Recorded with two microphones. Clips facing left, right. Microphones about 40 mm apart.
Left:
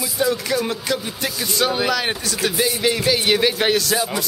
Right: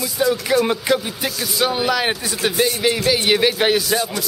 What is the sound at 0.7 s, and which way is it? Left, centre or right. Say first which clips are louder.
Speech: right 5 dB; centre.